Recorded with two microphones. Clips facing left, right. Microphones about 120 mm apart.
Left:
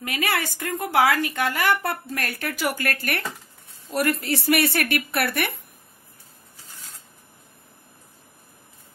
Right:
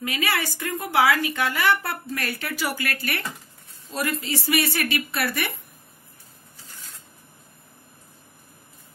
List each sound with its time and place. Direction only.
0.0 s speech: 55° left (ahead or behind)
3.9 s a woman's voice: 65° left (ahead or behind)